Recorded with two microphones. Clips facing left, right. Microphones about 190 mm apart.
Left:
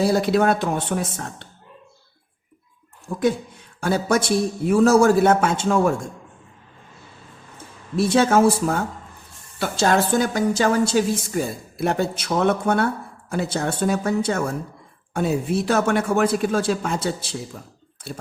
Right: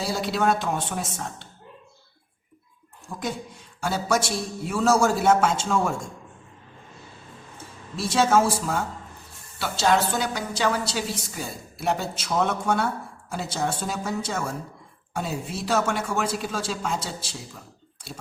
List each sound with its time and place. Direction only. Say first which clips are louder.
0.0 s speech: left 7 dB; 55° left (ahead or behind)
3.8 s speech: left 4 dB; 55° left (ahead or behind)
7.9 s a woman's voice: left 4 dB; 55° left (ahead or behind)